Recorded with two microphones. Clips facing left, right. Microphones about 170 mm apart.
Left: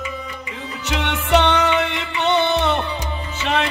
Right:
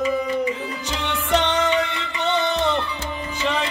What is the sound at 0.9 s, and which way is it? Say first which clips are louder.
Music: left 4 dB; 70° left (ahead or behind).